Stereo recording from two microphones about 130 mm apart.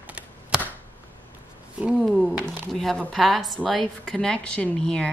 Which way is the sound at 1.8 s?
10° right (ahead or behind).